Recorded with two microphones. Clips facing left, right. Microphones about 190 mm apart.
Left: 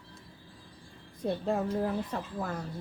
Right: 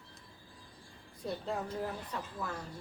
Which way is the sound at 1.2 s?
50° left (ahead or behind).